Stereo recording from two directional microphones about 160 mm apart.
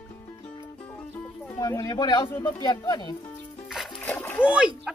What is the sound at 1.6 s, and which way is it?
Speech, 20° left (ahead or behind).